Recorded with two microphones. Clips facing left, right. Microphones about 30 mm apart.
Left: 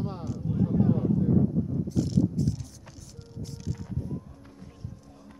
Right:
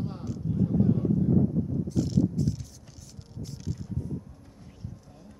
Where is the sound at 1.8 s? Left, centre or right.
Centre.